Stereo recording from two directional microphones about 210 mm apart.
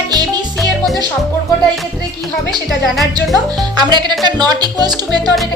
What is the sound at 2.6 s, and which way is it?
Music, centre (ahead or behind).